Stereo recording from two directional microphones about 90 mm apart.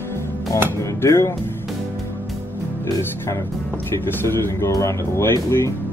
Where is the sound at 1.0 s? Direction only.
35° left (ahead or behind).